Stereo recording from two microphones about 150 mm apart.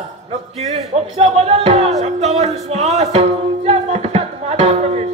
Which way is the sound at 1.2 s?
45° right (ahead or behind).